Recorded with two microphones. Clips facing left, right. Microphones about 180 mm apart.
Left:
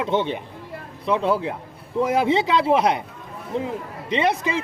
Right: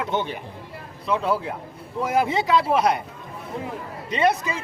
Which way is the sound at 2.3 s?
25° left (ahead or behind).